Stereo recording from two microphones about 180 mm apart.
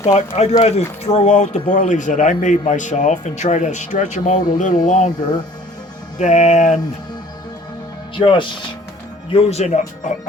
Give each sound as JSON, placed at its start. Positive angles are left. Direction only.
{"t": 0.1, "sound": "speech", "side_deg": 40}
{"t": 6.1, "sound": "speech", "side_deg": 40}
{"t": 8.1, "sound": "speech", "side_deg": 30}